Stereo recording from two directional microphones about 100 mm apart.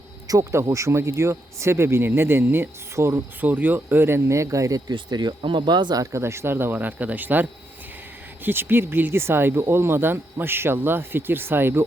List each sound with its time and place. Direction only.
0.3 s speech: 30° right (ahead or behind)
4.9 s speech: 50° right (ahead or behind)
6.0 s speech: 30° right (ahead or behind)
8.4 s speech: 20° right (ahead or behind)